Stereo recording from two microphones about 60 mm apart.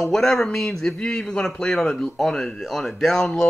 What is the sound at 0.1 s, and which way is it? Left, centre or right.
Speech, centre.